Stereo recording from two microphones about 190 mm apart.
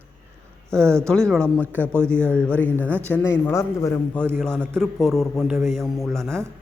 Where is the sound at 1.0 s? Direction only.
5° left (ahead or behind).